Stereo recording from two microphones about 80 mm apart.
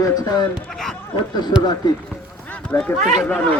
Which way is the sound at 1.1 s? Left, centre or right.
Left.